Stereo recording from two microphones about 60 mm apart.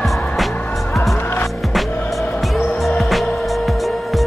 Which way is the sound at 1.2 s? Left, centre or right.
Left.